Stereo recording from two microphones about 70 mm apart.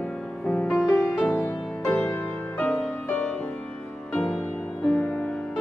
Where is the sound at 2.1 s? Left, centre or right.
Centre.